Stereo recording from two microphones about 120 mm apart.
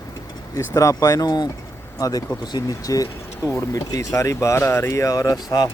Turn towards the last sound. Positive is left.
turn(degrees=30)  # may be behind; listen again after turning